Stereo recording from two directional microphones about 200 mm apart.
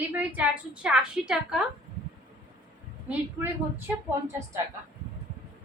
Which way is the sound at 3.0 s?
10° right (ahead or behind).